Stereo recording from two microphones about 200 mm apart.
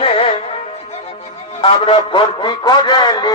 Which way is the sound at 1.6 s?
25° left (ahead or behind).